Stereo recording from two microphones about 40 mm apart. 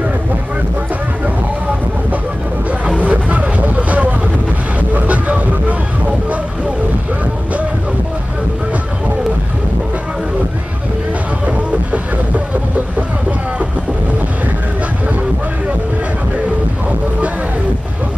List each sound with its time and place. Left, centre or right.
3.1 s vehicle: right